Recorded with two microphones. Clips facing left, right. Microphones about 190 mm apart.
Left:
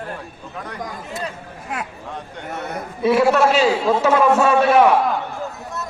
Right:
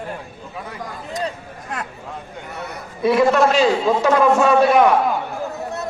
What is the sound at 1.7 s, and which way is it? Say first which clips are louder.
Speech: left 1 dB; 10° left (ahead or behind).